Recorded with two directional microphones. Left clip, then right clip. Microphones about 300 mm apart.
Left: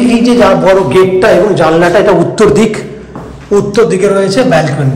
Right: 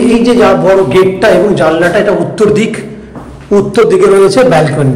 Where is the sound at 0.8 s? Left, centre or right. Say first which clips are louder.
Even; centre.